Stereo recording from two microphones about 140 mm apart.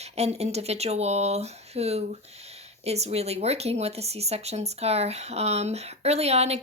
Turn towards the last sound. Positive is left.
turn(degrees=-50)  # may be behind; listen again after turning